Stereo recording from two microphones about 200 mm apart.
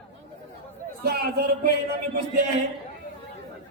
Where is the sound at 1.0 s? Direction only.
55° right (ahead or behind).